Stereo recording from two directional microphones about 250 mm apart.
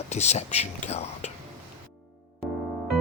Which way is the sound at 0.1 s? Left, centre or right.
Left.